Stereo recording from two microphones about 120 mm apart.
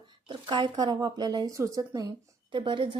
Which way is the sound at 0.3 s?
40° right (ahead or behind).